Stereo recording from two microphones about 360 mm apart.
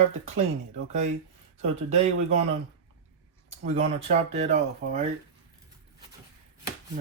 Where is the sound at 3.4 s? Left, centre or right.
Centre.